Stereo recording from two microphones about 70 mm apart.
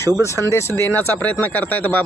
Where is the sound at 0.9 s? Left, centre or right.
Left.